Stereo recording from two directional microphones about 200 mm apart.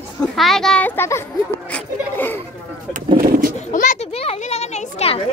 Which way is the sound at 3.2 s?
45° right (ahead or behind).